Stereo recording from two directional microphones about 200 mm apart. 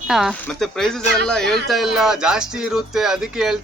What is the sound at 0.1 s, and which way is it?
Speech, centre (ahead or behind).